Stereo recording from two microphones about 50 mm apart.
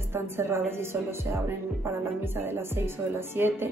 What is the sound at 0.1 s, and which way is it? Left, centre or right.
Speech, right.